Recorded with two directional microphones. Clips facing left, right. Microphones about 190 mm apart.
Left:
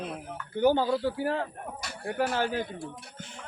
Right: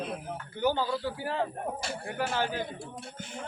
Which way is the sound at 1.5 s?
30° right (ahead or behind).